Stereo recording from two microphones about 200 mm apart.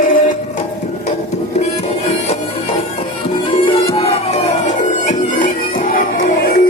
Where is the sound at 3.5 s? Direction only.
30° left (ahead or behind); by 6.0 s 45° left (ahead or behind).